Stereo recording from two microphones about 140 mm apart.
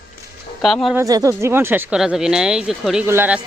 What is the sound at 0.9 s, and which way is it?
Speech, 25° right (ahead or behind).